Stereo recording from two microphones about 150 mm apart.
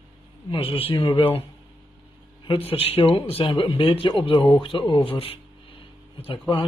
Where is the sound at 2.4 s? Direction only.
35° left (ahead or behind).